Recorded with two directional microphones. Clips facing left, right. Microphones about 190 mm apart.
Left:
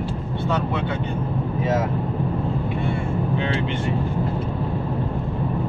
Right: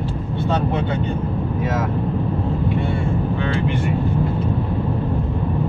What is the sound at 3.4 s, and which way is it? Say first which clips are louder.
Speech: right 2 dB; 25° left (ahead or behind).